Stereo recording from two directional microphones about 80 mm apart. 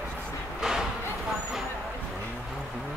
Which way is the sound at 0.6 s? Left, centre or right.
Centre.